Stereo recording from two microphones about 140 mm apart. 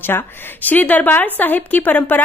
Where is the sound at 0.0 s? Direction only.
15° left (ahead or behind).